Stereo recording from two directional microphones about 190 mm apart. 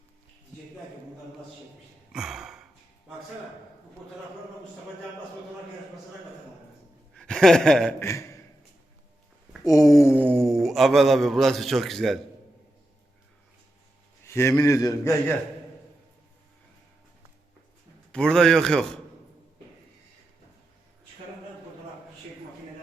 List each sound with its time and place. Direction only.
2.1 s sigh: centre (ahead or behind)
7.1 s a sound: 5° left (ahead or behind)
8.0 s a man's voice: 15° left (ahead or behind)
9.6 s a man's voice: 15° left (ahead or behind)
10.2 s a man's voice: 5° left (ahead or behind)
14.3 s a man's voice: 15° left (ahead or behind)
18.1 s a man's voice: 5° left (ahead or behind)